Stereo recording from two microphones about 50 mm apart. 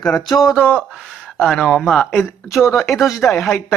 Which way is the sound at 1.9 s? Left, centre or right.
Centre.